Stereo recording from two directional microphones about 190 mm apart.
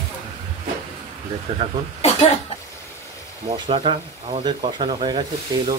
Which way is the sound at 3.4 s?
25° right (ahead or behind).